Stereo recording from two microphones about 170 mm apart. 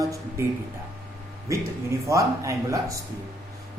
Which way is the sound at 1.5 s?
15° right (ahead or behind).